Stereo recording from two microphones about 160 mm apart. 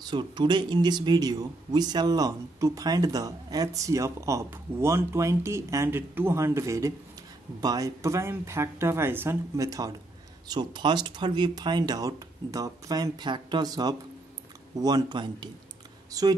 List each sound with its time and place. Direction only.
0.0 s speech: 30° right (ahead or behind)